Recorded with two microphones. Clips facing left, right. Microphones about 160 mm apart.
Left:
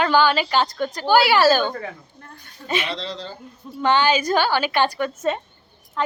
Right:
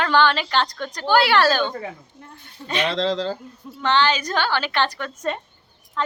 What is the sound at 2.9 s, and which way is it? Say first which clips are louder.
Speech: right 9 dB; 90° right.